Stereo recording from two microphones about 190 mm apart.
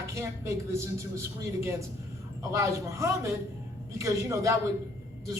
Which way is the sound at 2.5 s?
15° right (ahead or behind).